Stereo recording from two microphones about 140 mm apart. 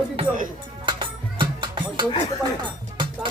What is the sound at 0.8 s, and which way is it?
Music, 35° right (ahead or behind).